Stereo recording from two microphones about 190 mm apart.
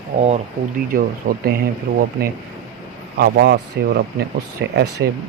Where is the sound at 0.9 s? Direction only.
50° right (ahead or behind).